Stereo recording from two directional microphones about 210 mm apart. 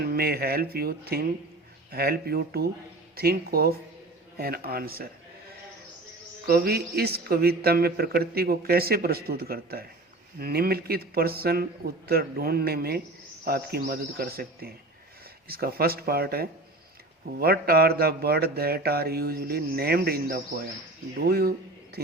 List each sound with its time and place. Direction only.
0.0 s a man's voice: 45° right (ahead or behind)
6.4 s a man's voice: 45° right (ahead or behind)